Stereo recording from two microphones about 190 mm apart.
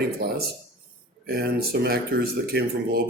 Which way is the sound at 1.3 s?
55° right (ahead or behind).